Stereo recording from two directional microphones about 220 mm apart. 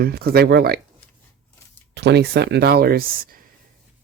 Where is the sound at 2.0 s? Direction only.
50° right (ahead or behind).